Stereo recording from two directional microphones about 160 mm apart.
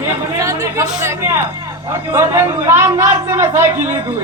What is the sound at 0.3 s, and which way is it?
Chatter, 20° right (ahead or behind).